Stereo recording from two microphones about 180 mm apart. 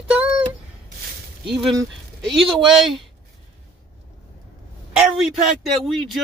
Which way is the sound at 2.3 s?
Centre (ahead or behind).